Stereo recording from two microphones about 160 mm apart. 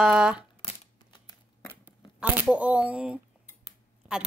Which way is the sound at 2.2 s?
10° right (ahead or behind).